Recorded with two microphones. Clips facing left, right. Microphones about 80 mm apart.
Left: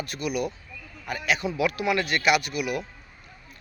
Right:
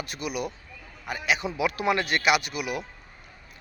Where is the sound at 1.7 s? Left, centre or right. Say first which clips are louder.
Even; right.